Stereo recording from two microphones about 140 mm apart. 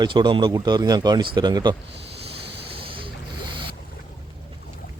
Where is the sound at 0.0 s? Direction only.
35° right (ahead or behind).